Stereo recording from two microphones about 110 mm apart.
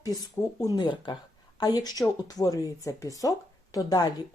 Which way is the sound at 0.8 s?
45° left (ahead or behind).